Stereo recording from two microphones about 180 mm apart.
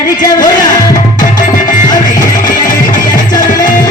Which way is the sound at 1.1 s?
45° left (ahead or behind).